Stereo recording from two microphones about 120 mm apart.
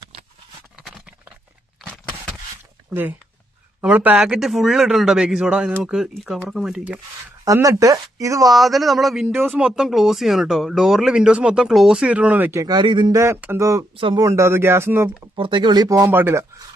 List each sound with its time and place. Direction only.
0.8 s a sound: centre (ahead or behind)
2.9 s speech: 15° right (ahead or behind)
4.2 s speech: 5° right (ahead or behind)
7.4 s speech: 25° right (ahead or behind)
8.4 s speech: centre (ahead or behind); by 12.6 s 20° right (ahead or behind)
12.6 s speech: 40° right (ahead or behind)
13.1 s speech: 20° right (ahead or behind)
13.9 s speech: 45° right (ahead or behind)
14.2 s speech: 25° right (ahead or behind)
15.4 s speech: 40° right (ahead or behind)
16.0 s speech: 15° right (ahead or behind)